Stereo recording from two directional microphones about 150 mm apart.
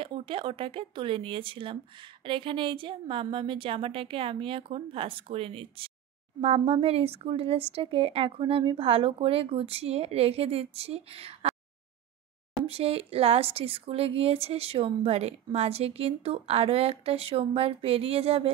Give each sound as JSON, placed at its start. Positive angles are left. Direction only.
{"t": 0.0, "sound": "speech", "side_deg": -35}
{"t": 12.6, "sound": "speech", "side_deg": -40}